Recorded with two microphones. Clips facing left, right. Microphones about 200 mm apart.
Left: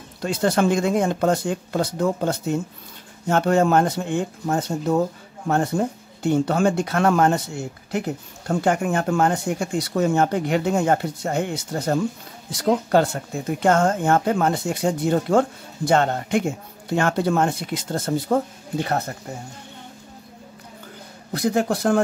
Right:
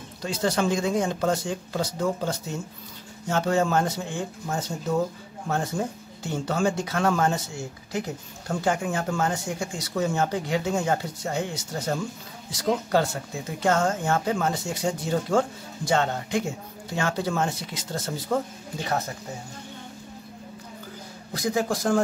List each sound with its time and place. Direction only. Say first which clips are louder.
0.2 s speech: left 5 dB; 60° left (ahead or behind)
21.3 s speech: left 4 dB; 60° left (ahead or behind)